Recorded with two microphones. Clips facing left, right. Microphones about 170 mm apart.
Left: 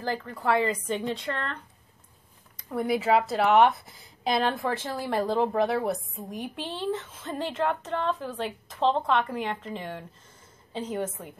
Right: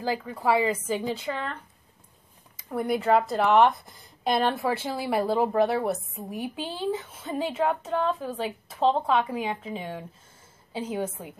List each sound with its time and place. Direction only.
0.0 s a woman's voice: 10° right (ahead or behind)